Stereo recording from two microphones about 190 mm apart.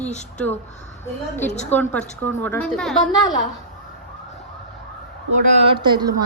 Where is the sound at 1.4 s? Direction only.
40° left (ahead or behind).